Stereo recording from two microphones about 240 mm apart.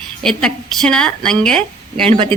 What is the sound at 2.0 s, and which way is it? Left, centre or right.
Speech, right.